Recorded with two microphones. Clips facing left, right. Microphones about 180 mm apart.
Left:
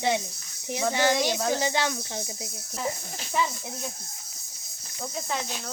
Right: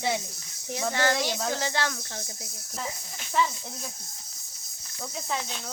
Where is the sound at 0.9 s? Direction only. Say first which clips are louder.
Left 2 dB; 15° left (ahead or behind).